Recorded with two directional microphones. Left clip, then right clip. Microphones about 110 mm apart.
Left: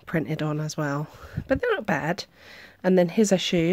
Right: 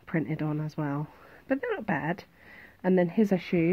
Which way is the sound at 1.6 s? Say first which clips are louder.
Left 7 dB; 55° left (ahead or behind).